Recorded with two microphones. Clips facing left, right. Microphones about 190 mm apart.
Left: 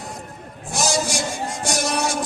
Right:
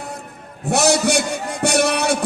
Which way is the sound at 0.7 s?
65° right (ahead or behind).